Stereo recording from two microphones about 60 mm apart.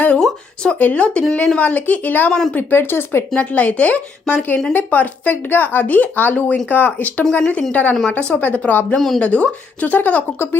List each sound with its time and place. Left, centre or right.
0.2 s speech: centre
0.8 s speech: left
3.3 s speech: left
9.0 s speech: centre
9.2 s speech: left
10.3 s speech: left